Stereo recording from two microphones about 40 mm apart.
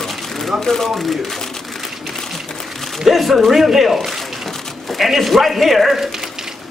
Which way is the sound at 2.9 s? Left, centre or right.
Centre.